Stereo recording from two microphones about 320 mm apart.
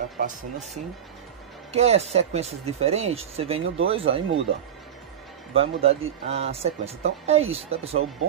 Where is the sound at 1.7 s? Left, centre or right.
Centre.